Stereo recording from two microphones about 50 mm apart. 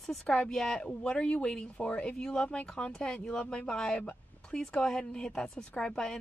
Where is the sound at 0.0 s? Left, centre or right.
Centre; by 2.0 s left.